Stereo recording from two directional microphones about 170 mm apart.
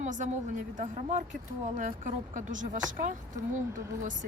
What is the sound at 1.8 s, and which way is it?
Speech, 50° right (ahead or behind).